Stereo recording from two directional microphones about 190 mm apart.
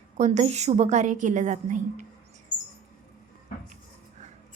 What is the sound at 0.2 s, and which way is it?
A woman's voice, 35° right (ahead or behind).